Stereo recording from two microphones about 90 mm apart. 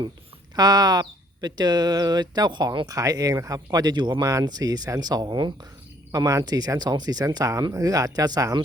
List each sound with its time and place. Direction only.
0.5 s speech: 50° right (ahead or behind)
4.2 s speech: 35° right (ahead or behind); by 5.5 s 55° right (ahead or behind)
6.1 s speech: 35° right (ahead or behind)